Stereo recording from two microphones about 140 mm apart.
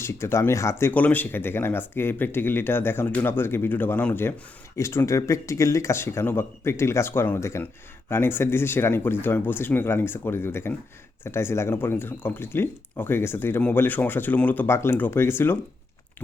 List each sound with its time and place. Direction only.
0.0 s speech: 20° left (ahead or behind)